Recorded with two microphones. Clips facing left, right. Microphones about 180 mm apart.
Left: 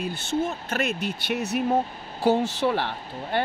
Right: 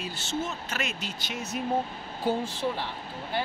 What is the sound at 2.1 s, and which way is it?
Speech, 80° left.